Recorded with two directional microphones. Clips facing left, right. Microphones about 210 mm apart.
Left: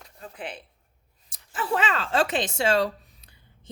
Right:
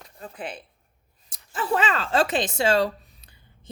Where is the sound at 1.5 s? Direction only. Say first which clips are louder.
Right 2 dB; 45° right (ahead or behind).